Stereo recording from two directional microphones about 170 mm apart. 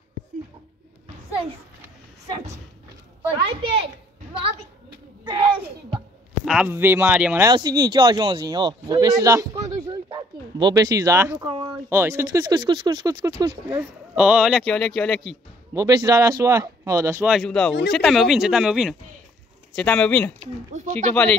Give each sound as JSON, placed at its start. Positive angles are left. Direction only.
{"t": 3.6, "sound": "a child's voice", "side_deg": -30}
{"t": 5.2, "sound": "a sound", "side_deg": -30}
{"t": 6.4, "sound": "speech", "side_deg": -5}
{"t": 7.4, "sound": "speech", "side_deg": -25}
{"t": 11.4, "sound": "speech", "side_deg": -30}
{"t": 11.9, "sound": "speech", "side_deg": -15}
{"t": 13.7, "sound": "speech", "side_deg": -10}
{"t": 15.7, "sound": "speech", "side_deg": -20}
{"t": 17.3, "sound": "speech", "side_deg": 0}
{"t": 20.7, "sound": "speech", "side_deg": -45}
{"t": 21.1, "sound": "speech", "side_deg": 5}